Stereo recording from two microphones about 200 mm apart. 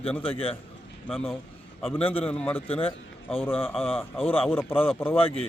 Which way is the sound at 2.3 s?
5° left (ahead or behind).